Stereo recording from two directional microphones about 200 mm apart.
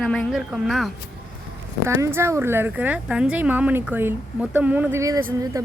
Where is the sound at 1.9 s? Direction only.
15° right (ahead or behind).